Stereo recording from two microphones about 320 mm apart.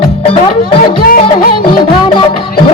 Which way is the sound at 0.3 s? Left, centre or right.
Left.